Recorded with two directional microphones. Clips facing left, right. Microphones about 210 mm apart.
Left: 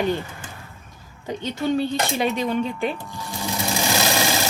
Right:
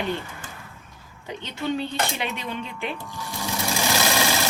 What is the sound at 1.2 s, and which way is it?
A woman's voice, 40° left (ahead or behind).